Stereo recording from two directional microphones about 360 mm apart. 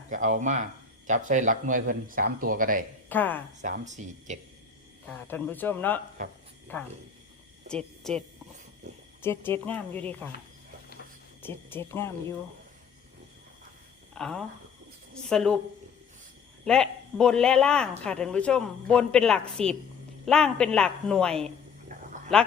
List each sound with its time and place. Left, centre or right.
0.1 s speech: right
3.1 s speech: centre
3.6 s speech: centre
5.0 s speech: centre
6.2 s speech: right
6.7 s speech: centre
9.2 s speech: centre
11.4 s speech: centre
14.2 s speech: centre
16.6 s speech: centre
21.9 s a sound: right
22.3 s speech: centre